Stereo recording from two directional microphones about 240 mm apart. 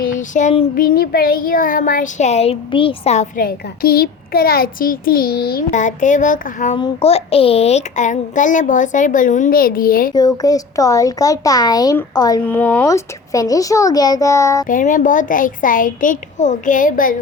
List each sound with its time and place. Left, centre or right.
0.0 s child singing: left
10.2 s speech: centre
14.7 s child singing: left